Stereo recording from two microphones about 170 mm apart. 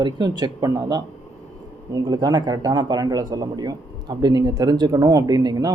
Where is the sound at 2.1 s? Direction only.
20° right (ahead or behind).